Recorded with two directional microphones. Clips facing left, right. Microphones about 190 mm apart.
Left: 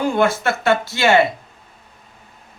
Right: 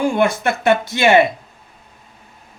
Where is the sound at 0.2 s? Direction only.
15° right (ahead or behind).